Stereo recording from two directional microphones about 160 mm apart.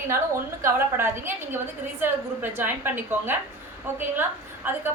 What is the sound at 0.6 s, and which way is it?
A woman's voice, 15° right (ahead or behind).